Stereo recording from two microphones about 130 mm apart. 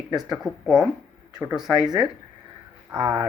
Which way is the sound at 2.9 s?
30° right (ahead or behind).